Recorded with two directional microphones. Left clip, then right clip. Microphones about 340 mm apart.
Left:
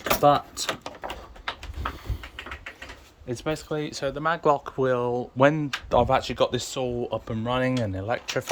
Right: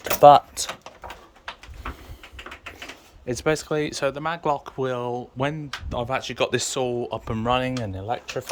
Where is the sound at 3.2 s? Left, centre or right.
Centre.